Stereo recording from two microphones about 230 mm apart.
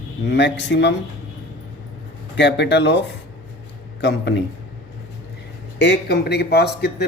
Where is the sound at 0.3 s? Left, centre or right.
Left.